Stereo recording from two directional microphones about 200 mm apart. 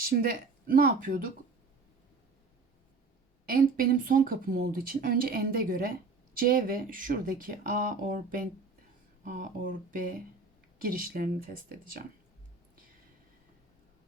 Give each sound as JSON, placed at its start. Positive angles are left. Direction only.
{"t": 0.0, "sound": "speech", "side_deg": -45}
{"t": 3.4, "sound": "speech", "side_deg": -45}